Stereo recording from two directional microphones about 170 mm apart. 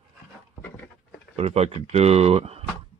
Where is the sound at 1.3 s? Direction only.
35° right (ahead or behind).